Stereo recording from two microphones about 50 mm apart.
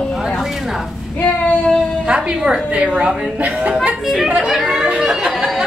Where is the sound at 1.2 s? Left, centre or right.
Left.